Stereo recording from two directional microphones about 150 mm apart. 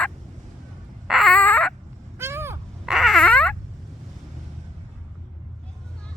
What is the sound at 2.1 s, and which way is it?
Vehicle, 15° right (ahead or behind).